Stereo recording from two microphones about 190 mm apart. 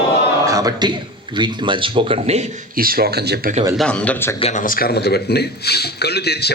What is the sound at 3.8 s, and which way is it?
Speech, 5° left (ahead or behind).